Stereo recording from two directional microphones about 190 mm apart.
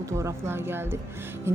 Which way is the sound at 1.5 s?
15° right (ahead or behind).